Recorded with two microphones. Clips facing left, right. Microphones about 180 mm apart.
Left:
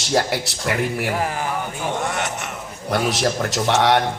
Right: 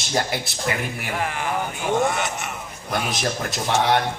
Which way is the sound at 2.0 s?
75° left (ahead or behind).